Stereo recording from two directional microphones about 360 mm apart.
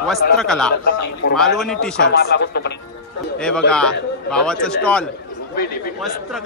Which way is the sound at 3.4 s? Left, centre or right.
Centre.